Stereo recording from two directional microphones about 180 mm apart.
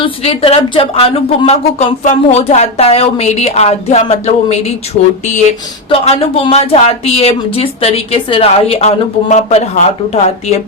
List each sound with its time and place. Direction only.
0.0 s speech: 30° left (ahead or behind)